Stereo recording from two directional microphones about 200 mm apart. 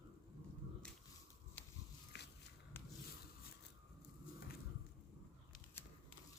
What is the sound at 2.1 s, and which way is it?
Biting, 55° left (ahead or behind).